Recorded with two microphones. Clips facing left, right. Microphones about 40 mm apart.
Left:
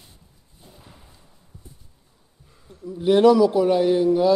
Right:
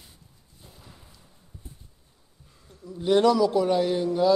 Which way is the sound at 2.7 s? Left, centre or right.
Centre.